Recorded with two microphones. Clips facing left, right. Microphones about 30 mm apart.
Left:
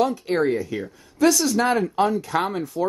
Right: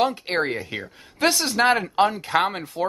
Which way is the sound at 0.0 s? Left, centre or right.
Right.